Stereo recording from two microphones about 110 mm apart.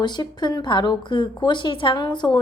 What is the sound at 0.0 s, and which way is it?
A woman's voice, 40° left (ahead or behind).